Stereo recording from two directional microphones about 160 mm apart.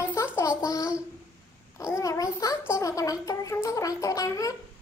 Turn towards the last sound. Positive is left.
turn(degrees=20)  # may be behind; listen again after turning